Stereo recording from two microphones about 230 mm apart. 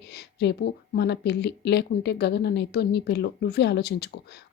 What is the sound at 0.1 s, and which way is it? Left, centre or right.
A woman's voice, left.